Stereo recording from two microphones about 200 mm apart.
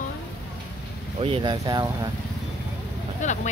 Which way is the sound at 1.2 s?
25° right (ahead or behind).